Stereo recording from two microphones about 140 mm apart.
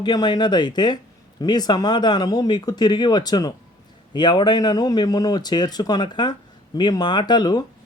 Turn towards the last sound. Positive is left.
turn(degrees=30)  # may be behind; listen again after turning